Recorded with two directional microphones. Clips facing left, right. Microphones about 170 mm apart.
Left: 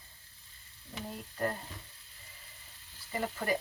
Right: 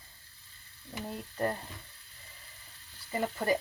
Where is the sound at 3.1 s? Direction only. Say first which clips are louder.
Right 3 dB; 35° right (ahead or behind).